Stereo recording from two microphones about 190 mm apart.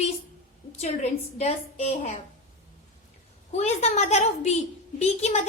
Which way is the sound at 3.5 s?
35° left (ahead or behind).